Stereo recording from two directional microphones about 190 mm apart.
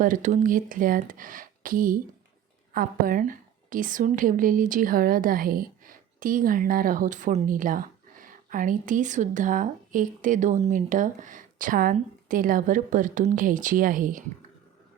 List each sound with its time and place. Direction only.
0.0 s a woman's voice: 45° right (ahead or behind)